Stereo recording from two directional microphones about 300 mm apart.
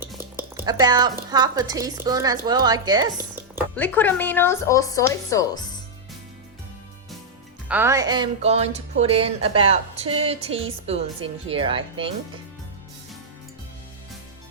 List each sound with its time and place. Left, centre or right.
0.0 s speech: centre
3.8 s speech: centre
7.7 s speech: centre